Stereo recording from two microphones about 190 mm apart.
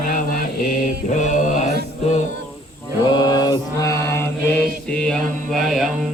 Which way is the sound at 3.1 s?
20° left (ahead or behind).